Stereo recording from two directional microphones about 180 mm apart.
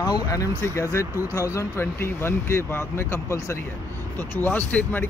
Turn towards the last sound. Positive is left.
turn(degrees=10)  # may be behind; listen again after turning